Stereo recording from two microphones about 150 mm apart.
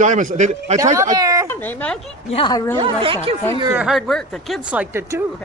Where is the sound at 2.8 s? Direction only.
35° right (ahead or behind).